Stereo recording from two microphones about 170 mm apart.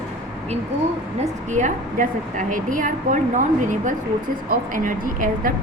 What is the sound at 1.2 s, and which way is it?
A woman's voice, 45° right (ahead or behind).